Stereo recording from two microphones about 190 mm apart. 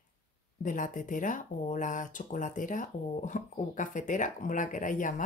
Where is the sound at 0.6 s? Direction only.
45° left (ahead or behind).